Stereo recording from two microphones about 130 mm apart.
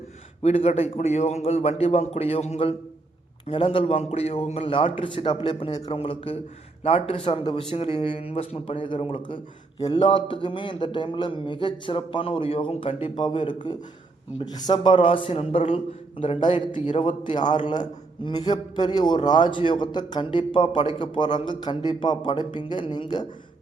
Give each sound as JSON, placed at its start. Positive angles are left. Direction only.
{"t": 0.4, "sound": "a man's voice", "side_deg": 55}